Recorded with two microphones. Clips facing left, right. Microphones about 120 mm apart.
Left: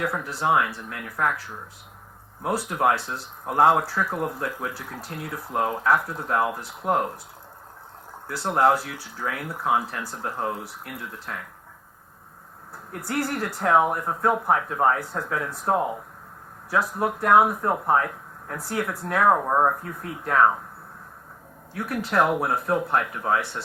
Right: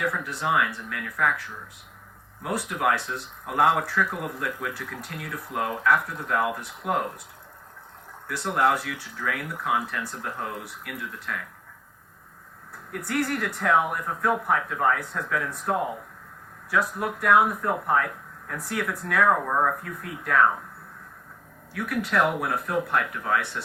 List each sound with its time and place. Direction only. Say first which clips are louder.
0.0 s speech: left 2 dB; 35° left (ahead or behind)
2.4 s speech: left 3 dB; 30° left (ahead or behind)
8.3 s speech: left 3 dB; 30° left (ahead or behind)
12.9 s speech: even; 30° left (ahead or behind)
21.7 s speech: even; 30° left (ahead or behind)